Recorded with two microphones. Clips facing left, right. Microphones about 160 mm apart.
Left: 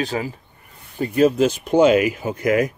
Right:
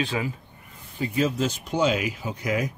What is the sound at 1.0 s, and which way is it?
Speech, 60° left (ahead or behind).